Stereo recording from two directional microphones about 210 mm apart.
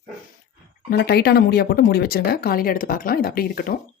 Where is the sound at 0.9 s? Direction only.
50° left (ahead or behind).